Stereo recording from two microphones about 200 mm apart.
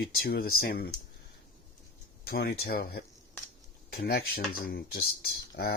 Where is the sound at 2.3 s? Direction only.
55° left (ahead or behind).